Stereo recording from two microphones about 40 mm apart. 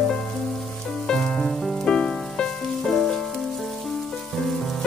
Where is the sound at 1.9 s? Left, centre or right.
Left.